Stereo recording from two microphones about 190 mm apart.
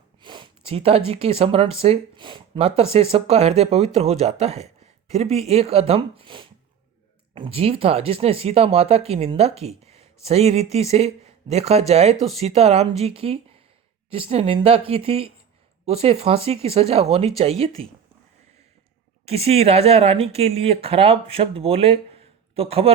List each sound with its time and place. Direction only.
0.2 s speech: 25° right (ahead or behind)
19.2 s speech: 30° right (ahead or behind)